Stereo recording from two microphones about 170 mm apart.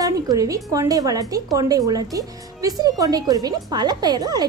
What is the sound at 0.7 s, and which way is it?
Speech, 20° right (ahead or behind).